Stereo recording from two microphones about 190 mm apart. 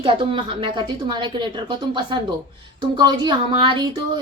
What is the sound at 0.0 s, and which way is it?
A woman's voice, 30° right (ahead or behind).